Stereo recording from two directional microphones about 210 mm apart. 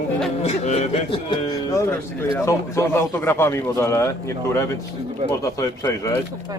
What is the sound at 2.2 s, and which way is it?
Speech, 15° left (ahead or behind).